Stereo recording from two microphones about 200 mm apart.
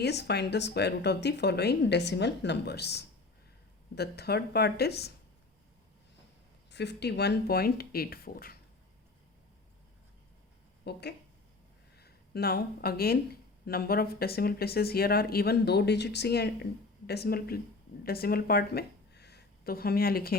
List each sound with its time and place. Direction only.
0.0 s speech: 55° left (ahead or behind)
6.7 s speech: 60° left (ahead or behind)
10.8 s speech: 55° left (ahead or behind)